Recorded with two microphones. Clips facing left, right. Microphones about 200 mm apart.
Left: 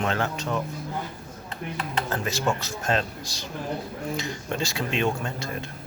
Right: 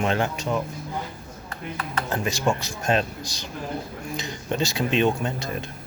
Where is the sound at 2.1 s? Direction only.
15° right (ahead or behind).